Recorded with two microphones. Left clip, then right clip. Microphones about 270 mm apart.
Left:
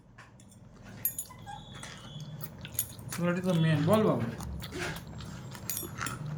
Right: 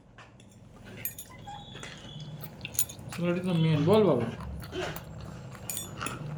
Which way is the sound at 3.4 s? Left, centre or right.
Left.